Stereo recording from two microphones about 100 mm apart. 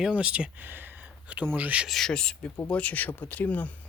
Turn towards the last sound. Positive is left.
turn(degrees=15)  # may be behind; listen again after turning